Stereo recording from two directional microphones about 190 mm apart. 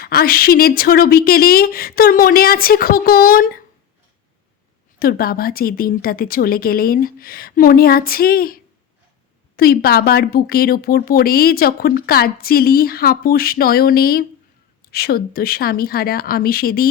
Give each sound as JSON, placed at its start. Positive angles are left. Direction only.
{"t": 0.0, "sound": "speech", "side_deg": 50}
{"t": 4.9, "sound": "speech", "side_deg": 50}